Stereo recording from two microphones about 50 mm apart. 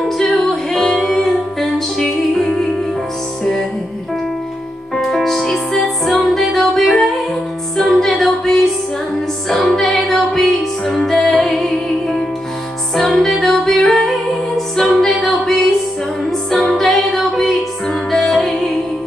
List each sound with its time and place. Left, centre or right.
0.2 s music: centre
5.0 s music: centre